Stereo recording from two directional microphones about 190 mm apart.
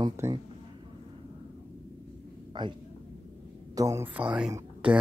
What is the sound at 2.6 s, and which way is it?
Speech, 25° right (ahead or behind).